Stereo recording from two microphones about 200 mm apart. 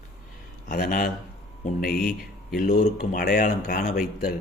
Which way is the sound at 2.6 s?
50° left (ahead or behind).